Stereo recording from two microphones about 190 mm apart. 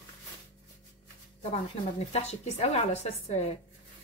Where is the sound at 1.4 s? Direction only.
35° left (ahead or behind).